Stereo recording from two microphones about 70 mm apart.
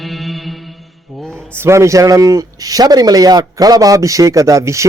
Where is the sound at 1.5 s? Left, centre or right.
Right.